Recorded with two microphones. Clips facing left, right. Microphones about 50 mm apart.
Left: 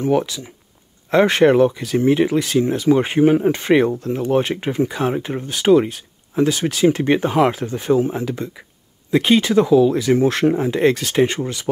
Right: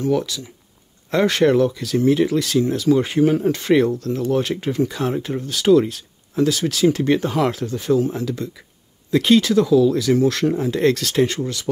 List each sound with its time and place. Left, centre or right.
0.0 s speech: left